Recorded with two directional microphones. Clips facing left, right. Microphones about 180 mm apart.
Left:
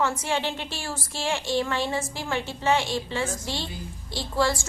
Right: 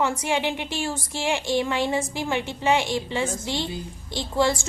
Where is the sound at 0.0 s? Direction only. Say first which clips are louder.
Right 2 dB; 15° right (ahead or behind).